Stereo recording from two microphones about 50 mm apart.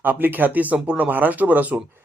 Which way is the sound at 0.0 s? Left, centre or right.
Right.